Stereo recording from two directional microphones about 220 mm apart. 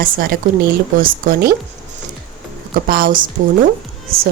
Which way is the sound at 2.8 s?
40° right (ahead or behind).